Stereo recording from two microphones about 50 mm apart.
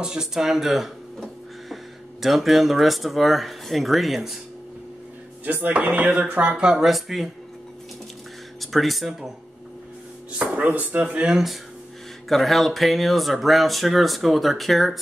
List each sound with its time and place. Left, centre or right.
0.0 s speech: centre
2.2 s speech: centre
5.4 s speech: right
6.5 s speech: centre
6.9 s speech: centre
8.5 s speech: centre
10.4 s speech: right
11.2 s speech: centre